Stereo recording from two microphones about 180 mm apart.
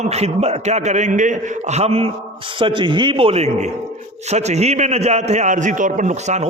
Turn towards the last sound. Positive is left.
turn(degrees=-40)  # may be behind; listen again after turning